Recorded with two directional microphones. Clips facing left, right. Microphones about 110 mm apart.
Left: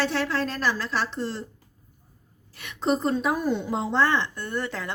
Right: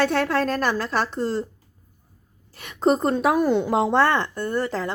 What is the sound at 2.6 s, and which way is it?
A woman's voice, 45° right (ahead or behind).